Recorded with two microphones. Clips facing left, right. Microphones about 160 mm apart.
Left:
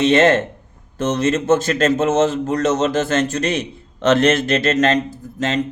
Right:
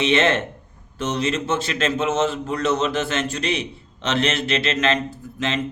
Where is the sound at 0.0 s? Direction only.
45° left (ahead or behind).